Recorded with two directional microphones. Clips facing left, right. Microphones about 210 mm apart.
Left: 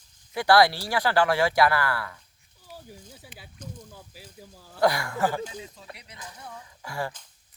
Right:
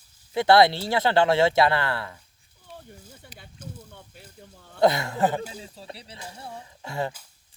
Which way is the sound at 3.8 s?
5° left (ahead or behind).